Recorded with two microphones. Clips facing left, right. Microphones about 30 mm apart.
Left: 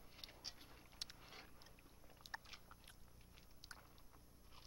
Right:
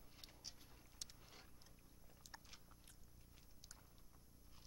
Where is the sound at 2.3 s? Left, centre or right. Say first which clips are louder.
Left 8 dB; left.